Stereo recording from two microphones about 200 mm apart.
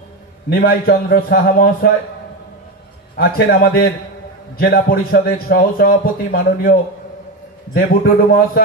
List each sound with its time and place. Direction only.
0.5 s a man's voice: 50° left (ahead or behind)
3.2 s a man's voice: 50° left (ahead or behind)